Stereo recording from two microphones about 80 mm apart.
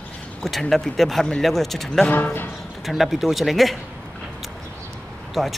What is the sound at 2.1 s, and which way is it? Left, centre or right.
Speech, left.